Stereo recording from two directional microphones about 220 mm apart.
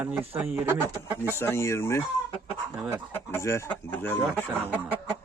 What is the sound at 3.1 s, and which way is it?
Speech, 10° left (ahead or behind).